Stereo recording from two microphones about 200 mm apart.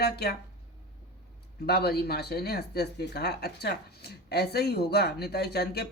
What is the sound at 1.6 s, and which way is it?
Speech, 55° left (ahead or behind).